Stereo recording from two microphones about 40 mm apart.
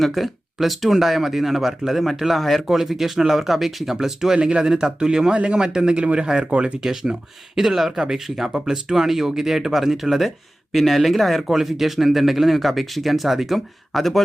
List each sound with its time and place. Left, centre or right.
0.0 s speech: centre
4.4 s a man's voice: right
6.5 s speech: right
6.8 s speech: centre